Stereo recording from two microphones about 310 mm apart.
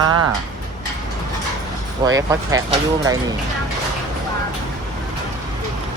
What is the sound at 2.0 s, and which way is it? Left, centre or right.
Speech, centre.